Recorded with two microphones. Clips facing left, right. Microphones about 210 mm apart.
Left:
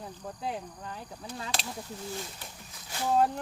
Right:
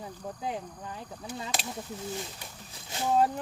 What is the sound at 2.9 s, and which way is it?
Boat, 20° right (ahead or behind).